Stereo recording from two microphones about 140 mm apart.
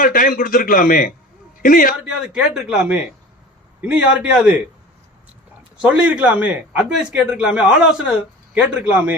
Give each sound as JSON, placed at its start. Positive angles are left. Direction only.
{"t": 0.0, "sound": "a man's voice", "side_deg": 90}
{"t": 2.0, "sound": "a man's voice", "side_deg": -5}
{"t": 5.8, "sound": "a man's voice", "side_deg": -10}